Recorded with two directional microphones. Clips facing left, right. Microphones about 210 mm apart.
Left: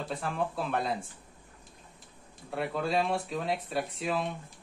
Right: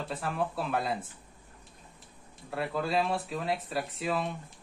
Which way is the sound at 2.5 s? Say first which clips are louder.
Even; centre (ahead or behind).